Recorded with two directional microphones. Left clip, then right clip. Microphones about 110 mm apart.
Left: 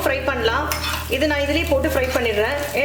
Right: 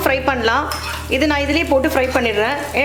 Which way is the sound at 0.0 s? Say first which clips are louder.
Right 4 dB; 35° right (ahead or behind).